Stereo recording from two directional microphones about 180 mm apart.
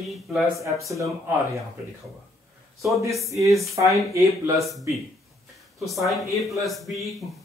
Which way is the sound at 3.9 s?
15° right (ahead or behind).